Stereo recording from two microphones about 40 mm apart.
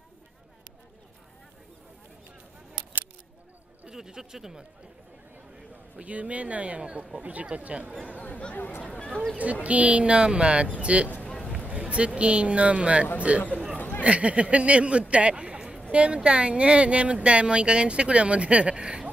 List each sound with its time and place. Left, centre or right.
3.9 s speech: centre
5.9 s speech: right
8.2 s speech: left
8.9 s speech: centre
9.4 s speech: right
13.7 s a sound: left
14.0 s a woman's voice: right